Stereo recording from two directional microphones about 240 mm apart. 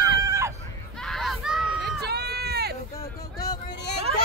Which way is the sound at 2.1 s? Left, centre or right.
Right.